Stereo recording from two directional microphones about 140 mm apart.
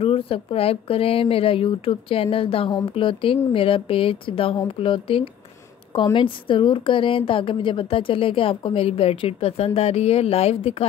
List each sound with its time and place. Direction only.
0.0 s a woman's voice: 40° left (ahead or behind)